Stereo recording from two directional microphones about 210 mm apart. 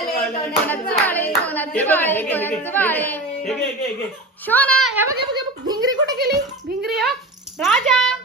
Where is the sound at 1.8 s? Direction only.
10° left (ahead or behind).